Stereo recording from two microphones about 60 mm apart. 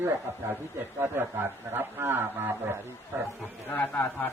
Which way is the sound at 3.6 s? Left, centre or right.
Left.